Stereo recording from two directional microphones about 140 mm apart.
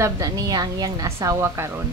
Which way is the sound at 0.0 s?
25° right (ahead or behind).